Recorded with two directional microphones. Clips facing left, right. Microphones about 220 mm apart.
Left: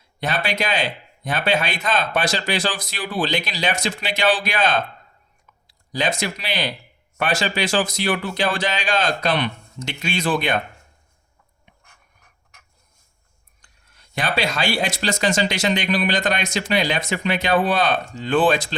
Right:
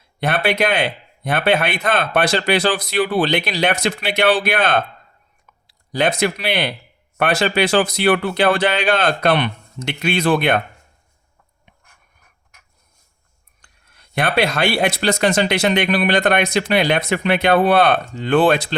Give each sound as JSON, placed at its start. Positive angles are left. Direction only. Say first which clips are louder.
{"t": 0.2, "sound": "speech", "louder": "right 6 dB", "side_deg": -60}
{"t": 13.6, "sound": "speech", "louder": "right 2 dB", "side_deg": -60}